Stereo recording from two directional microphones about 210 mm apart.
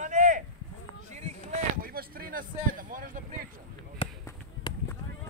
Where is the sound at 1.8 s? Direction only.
45° right (ahead or behind).